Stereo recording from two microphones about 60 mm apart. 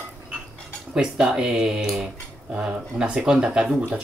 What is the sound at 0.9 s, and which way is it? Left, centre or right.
Speech, centre.